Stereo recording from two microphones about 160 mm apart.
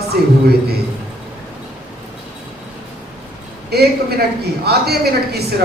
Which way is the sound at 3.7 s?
80° right.